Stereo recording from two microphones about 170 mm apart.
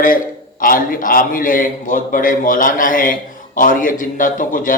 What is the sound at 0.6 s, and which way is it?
A man's voice, 55° left (ahead or behind).